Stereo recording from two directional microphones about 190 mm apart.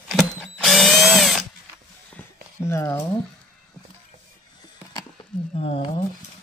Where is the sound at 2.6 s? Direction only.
15° left (ahead or behind).